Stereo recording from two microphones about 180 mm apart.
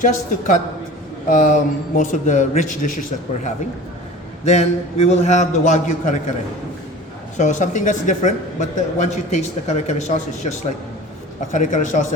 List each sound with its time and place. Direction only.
0.0 s a man's voice: 45° left (ahead or behind)
4.4 s a man's voice: 35° left (ahead or behind)
7.3 s a man's voice: 45° left (ahead or behind)
11.5 s speech: 45° left (ahead or behind)